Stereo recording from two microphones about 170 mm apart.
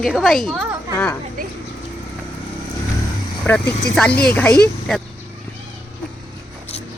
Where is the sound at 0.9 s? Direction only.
15° left (ahead or behind).